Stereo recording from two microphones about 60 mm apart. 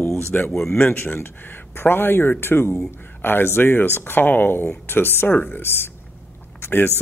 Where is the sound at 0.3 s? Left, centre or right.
Left.